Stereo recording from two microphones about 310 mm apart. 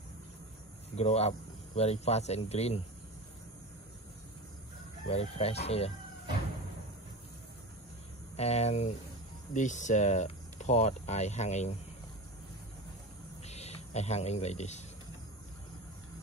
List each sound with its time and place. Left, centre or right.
0.9 s speech: left
5.1 s speech: centre
8.4 s speech: left
13.4 s a sound: left